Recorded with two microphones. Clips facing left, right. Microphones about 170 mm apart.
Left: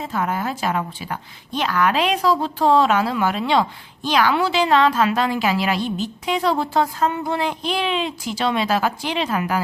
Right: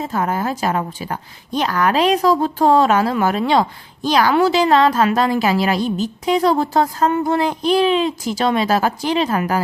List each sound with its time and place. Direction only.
0.0 s a woman's voice: 40° right (ahead or behind)